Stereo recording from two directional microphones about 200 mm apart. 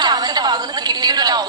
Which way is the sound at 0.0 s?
20° right (ahead or behind).